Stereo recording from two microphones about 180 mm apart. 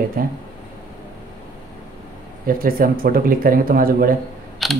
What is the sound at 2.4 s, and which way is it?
Speech, 55° right (ahead or behind).